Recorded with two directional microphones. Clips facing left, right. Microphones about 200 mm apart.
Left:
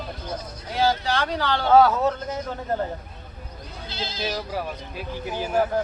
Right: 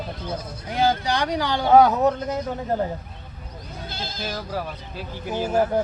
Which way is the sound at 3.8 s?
50° right (ahead or behind).